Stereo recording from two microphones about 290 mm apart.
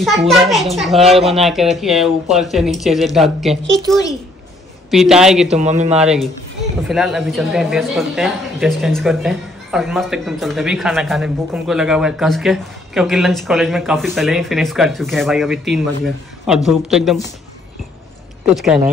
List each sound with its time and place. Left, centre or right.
0.0 s speech: centre
5.5 s speech: right
5.9 s speech: centre
18.5 s speech: centre